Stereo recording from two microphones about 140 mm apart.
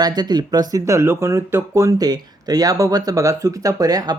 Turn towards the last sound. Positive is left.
turn(degrees=-25)  # may be behind; listen again after turning